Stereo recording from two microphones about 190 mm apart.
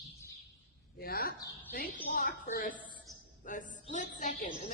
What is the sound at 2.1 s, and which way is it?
A woman's voice, 50° left (ahead or behind).